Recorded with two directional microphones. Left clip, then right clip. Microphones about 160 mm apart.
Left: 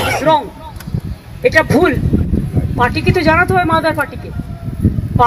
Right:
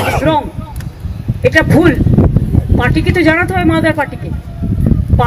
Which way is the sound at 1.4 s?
30° left (ahead or behind).